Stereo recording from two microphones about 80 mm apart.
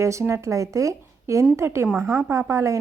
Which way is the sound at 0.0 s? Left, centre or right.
Right.